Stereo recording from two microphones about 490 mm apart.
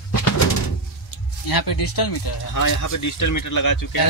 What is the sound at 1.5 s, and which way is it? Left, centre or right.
Speech, left.